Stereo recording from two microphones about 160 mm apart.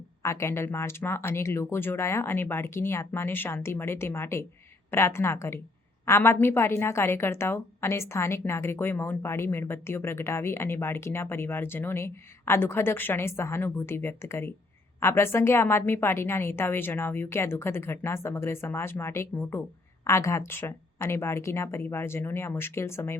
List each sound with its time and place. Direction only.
0.2 s a woman's voice: 15° left (ahead or behind)